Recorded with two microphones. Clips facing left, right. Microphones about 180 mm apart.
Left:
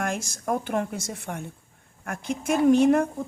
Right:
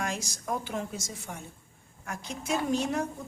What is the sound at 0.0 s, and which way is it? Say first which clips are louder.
A woman's voice: left 5 dB; 55° left (ahead or behind).